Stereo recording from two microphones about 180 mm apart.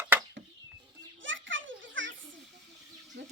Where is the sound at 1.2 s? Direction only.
90° right.